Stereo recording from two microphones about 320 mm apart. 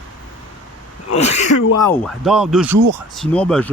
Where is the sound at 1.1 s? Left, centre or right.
Left.